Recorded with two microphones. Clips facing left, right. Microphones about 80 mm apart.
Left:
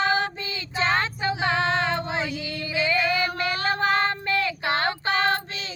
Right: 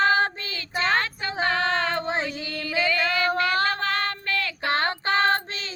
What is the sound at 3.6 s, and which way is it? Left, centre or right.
Female singing, left.